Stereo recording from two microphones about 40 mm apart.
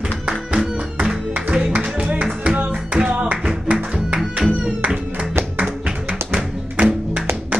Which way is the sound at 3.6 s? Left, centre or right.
Right.